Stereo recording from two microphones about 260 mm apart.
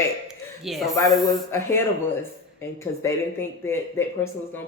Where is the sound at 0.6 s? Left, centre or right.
Centre.